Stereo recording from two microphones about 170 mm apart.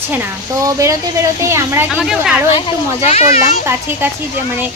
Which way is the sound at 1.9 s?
5° right (ahead or behind).